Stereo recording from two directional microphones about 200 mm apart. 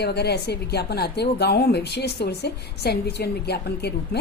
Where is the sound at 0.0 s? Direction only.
55° left (ahead or behind).